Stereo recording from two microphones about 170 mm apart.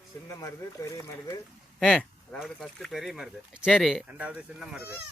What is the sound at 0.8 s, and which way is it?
Speech, 20° left (ahead or behind).